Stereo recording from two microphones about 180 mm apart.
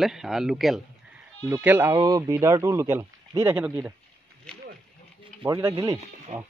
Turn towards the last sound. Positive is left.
turn(degrees=-40)  # may be behind; listen again after turning